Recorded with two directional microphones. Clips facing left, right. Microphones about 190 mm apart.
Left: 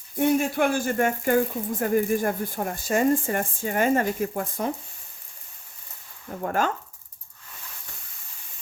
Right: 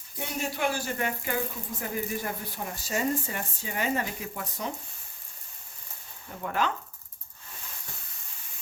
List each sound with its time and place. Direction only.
0.2 s speech: 55° left (ahead or behind)
6.4 s speech: 45° left (ahead or behind)